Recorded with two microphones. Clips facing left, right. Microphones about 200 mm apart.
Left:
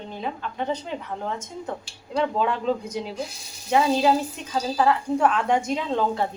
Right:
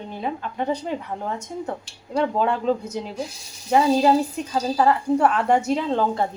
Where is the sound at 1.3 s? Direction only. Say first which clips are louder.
Right 3 dB; 10° right (ahead or behind).